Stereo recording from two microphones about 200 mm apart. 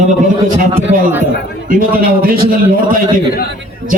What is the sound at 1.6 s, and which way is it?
Speech, 45° right (ahead or behind).